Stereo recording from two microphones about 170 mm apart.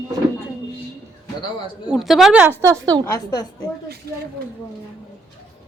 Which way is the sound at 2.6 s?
20° right (ahead or behind).